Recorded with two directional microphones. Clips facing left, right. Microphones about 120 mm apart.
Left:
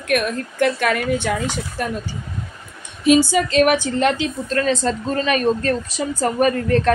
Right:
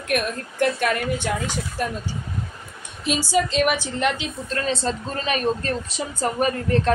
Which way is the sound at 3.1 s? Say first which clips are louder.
Left 2 dB; 50° left (ahead or behind).